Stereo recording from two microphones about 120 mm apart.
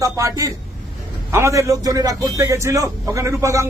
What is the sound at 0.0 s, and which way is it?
A man's voice, 25° right (ahead or behind).